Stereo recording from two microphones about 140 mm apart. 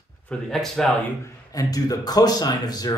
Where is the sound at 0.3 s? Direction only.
5° left (ahead or behind).